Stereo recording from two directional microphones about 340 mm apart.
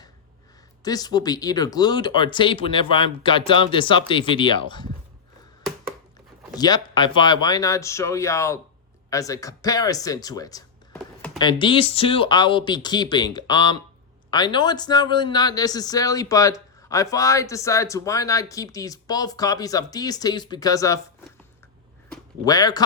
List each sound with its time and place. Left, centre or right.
0.9 s speech: centre
6.6 s speech: centre
22.1 s speech: centre